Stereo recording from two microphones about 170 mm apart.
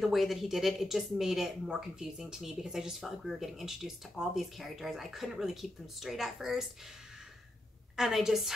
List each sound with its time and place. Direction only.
0.0 s speech: centre (ahead or behind)
7.9 s speech: centre (ahead or behind)